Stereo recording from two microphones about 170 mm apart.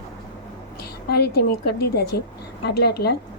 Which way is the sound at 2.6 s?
75° left (ahead or behind).